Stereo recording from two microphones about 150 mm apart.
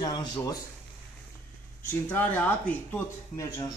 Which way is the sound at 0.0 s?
30° left (ahead or behind).